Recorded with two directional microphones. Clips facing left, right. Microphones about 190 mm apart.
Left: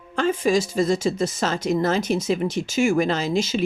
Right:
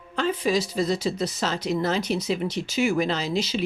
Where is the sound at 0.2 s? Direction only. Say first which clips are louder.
Left 3 dB; 45° left (ahead or behind).